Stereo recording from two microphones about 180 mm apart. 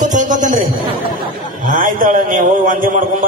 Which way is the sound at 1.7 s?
45° right (ahead or behind).